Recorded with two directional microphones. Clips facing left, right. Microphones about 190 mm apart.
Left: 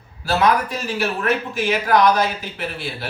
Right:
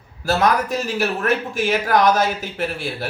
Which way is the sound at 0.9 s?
45° right (ahead or behind).